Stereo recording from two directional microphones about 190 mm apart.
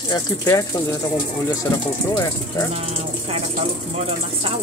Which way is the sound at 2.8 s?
30° right (ahead or behind).